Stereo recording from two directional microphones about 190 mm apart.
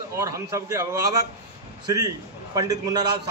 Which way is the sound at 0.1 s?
15° right (ahead or behind).